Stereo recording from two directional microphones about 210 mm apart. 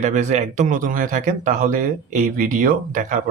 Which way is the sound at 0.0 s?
35° right (ahead or behind).